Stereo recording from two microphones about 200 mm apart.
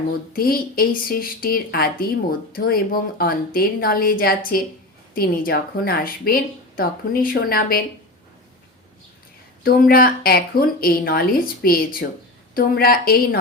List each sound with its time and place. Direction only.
0.3 s speech: 45° left (ahead or behind)
9.6 s speech: 45° left (ahead or behind)